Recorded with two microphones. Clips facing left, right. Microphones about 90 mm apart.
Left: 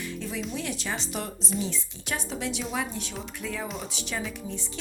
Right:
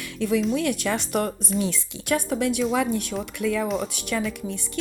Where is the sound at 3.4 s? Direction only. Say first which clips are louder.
Right 10 dB; 70° right (ahead or behind).